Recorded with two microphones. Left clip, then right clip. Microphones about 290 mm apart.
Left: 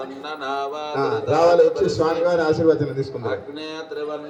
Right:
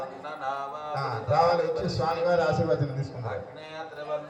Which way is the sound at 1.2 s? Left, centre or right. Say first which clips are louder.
Left 8 dB; left.